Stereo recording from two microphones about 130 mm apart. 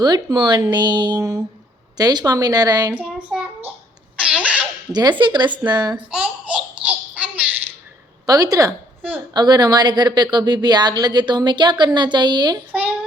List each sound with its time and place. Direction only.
0.0 s speech: 35° right (ahead or behind)
2.9 s child singing: 10° right (ahead or behind)
4.2 s baby laughter: 10° right (ahead or behind)
4.9 s speech: 35° right (ahead or behind)
6.1 s babbling: 5° right (ahead or behind)
8.3 s speech: 30° right (ahead or behind)
9.0 s a sound: 15° right (ahead or behind)
9.3 s speech: 35° right (ahead or behind)